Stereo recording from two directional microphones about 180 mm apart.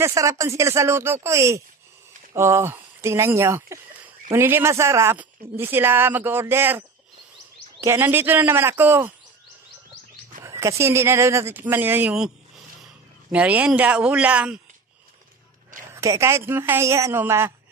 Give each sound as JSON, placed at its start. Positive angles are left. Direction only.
{"t": 0.0, "sound": "speech", "side_deg": -15}
{"t": 7.8, "sound": "speech", "side_deg": -10}
{"t": 10.4, "sound": "speech", "side_deg": -15}
{"t": 13.3, "sound": "speech", "side_deg": -10}
{"t": 15.9, "sound": "speech", "side_deg": -15}